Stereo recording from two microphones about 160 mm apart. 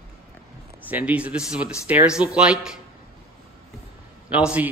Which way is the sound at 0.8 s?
10° right (ahead or behind).